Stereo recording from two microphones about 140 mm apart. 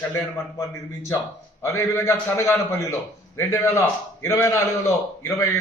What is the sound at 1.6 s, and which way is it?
A man's voice, 20° left (ahead or behind).